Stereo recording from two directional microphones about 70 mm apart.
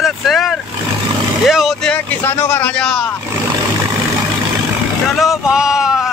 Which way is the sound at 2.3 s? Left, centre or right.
Left.